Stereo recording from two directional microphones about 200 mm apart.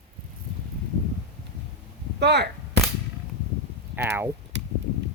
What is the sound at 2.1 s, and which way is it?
Speech, 55° right (ahead or behind).